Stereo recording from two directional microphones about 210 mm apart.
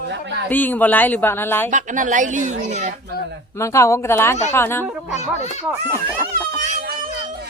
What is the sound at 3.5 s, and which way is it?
Speech, 15° left (ahead or behind).